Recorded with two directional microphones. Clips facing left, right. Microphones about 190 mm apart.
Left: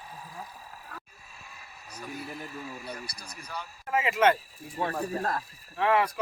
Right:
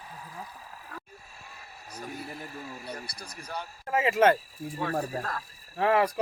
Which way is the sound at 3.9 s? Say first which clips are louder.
Right 2 dB; 40° right (ahead or behind).